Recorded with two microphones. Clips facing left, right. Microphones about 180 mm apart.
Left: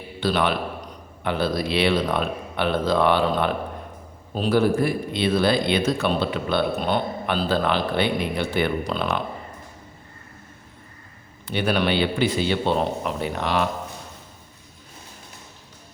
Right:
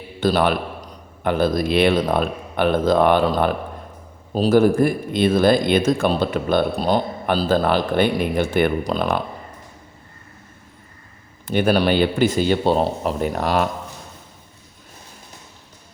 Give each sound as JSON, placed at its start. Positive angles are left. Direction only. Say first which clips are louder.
{"t": 0.2, "sound": "speech", "louder": "right 4 dB", "side_deg": -45}
{"t": 11.4, "sound": "speech", "louder": "right 5 dB", "side_deg": -45}